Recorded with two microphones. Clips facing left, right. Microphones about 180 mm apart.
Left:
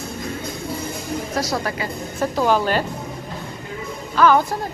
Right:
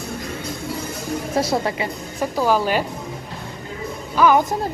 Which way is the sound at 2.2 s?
10° right (ahead or behind).